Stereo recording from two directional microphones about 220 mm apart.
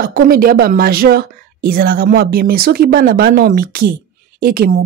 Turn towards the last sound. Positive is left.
turn(degrees=-40)  # may be behind; listen again after turning